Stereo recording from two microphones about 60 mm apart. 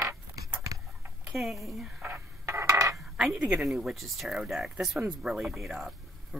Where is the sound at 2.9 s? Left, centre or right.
Centre.